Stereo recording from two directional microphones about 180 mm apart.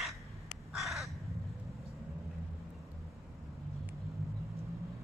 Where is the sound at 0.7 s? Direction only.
Centre (ahead or behind).